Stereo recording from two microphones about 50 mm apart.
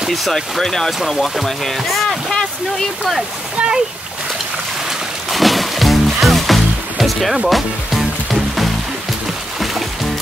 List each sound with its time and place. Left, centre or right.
0.1 s speech: centre
3.5 s a child's voice: centre
5.3 s music: centre
7.4 s speech: centre